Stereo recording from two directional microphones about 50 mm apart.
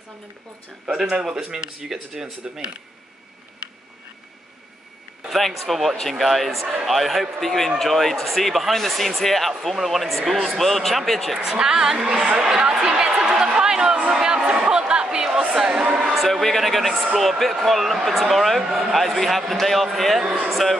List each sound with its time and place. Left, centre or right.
0.9 s speech: centre
5.3 s speech: centre
11.3 s speech: centre
12.4 s a sound: centre
16.2 s speech: centre